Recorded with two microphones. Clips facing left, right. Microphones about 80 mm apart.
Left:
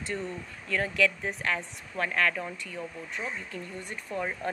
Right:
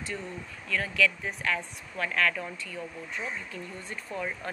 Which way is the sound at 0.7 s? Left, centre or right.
Left.